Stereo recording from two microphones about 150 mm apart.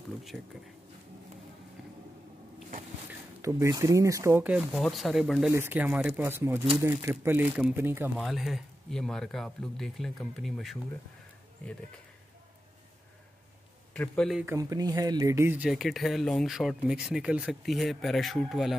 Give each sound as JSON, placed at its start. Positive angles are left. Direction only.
{"t": 0.3, "sound": "speech", "side_deg": 0}
{"t": 3.4, "sound": "speech", "side_deg": -20}
{"t": 4.5, "sound": "speech", "side_deg": 0}
{"t": 5.5, "sound": "speech", "side_deg": -15}
{"t": 8.2, "sound": "speech", "side_deg": 0}
{"t": 13.9, "sound": "speech", "side_deg": 5}
{"t": 14.4, "sound": "speech", "side_deg": -20}